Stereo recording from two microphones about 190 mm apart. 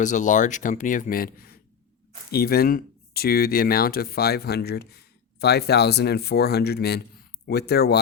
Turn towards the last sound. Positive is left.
turn(degrees=55)  # may be behind; listen again after turning